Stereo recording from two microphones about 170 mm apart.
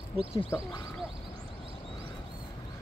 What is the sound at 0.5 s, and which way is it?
Speech, 15° left (ahead or behind).